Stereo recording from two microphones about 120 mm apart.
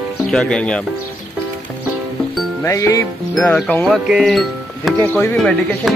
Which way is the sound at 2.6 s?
25° left (ahead or behind).